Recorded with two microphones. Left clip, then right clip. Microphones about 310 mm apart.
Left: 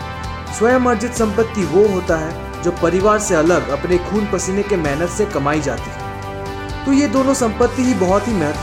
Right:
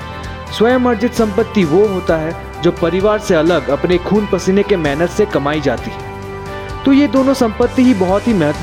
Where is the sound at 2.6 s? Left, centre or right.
Right.